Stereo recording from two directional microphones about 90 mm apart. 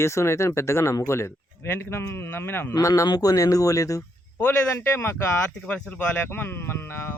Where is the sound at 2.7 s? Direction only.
40° left (ahead or behind).